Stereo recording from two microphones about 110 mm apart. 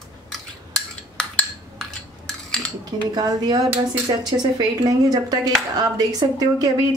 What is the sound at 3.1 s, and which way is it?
Speech, 40° right (ahead or behind).